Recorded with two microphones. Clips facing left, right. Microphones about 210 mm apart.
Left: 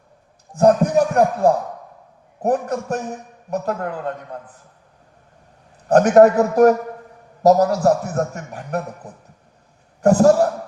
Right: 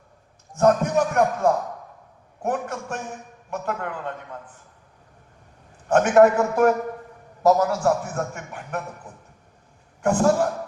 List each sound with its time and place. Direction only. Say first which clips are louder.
0.5 s a man's voice: left 4 dB; 30° left (ahead or behind)
5.9 s a man's voice: left 4 dB; 35° left (ahead or behind)